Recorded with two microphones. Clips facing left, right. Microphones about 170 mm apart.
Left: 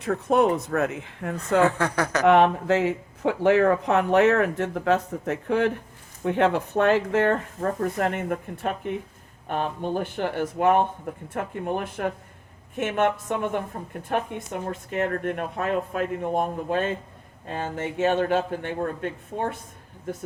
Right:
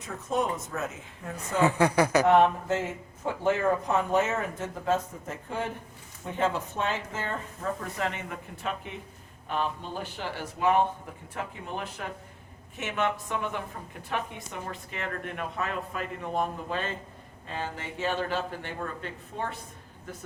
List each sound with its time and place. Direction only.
0.0 s speech: 60° left (ahead or behind)
1.6 s speech: 10° right (ahead or behind)
2.2 s speech: 70° left (ahead or behind)
7.8 s a woman's voice: 50° left (ahead or behind)